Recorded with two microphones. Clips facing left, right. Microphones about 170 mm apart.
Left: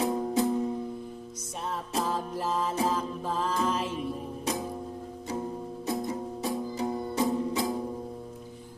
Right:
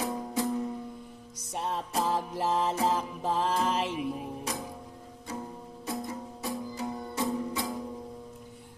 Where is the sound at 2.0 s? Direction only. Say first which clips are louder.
Right 2 dB; 15° right (ahead or behind).